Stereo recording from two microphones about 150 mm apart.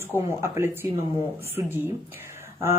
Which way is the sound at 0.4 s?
15° right (ahead or behind).